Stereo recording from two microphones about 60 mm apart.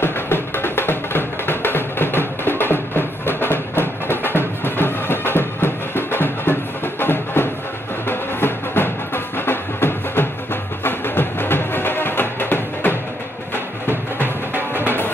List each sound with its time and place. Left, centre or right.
0.0 s music: left
14.1 s music: right